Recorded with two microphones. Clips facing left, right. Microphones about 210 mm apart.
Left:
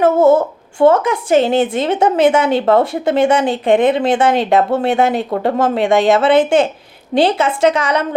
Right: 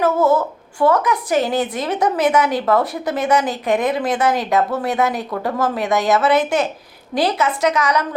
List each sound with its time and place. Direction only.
0.0 s speech: 25° left (ahead or behind)